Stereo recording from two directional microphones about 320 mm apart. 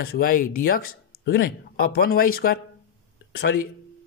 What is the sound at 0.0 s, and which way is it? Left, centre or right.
Speech, left.